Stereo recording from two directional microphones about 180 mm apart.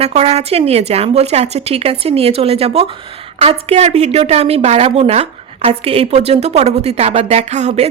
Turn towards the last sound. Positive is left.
turn(degrees=-40)  # may be behind; listen again after turning